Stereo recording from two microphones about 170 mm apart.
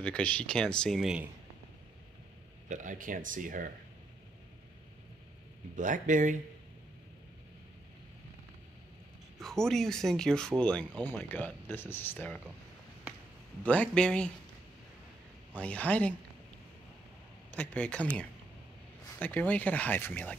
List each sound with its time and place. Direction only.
0.0 s speech: 10° left (ahead or behind)
2.7 s speech: 50° right (ahead or behind)
5.8 s speech: 50° right (ahead or behind)
9.4 s speech: centre (ahead or behind)
13.7 s speech: 5° left (ahead or behind)
15.5 s speech: 10° left (ahead or behind)
17.6 s speech: 5° left (ahead or behind)
19.1 s speech: 10° left (ahead or behind)